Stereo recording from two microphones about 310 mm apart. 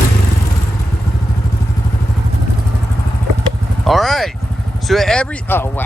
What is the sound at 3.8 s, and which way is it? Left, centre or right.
Vehicle, centre.